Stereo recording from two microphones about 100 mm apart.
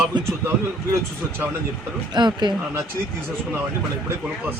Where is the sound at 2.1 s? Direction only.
50° right (ahead or behind).